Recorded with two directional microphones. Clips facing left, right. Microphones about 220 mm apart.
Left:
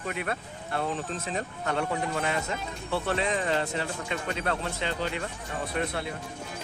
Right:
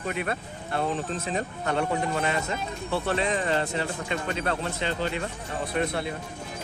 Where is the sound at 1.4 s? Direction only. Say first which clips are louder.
Right 2 dB; 10° right (ahead or behind).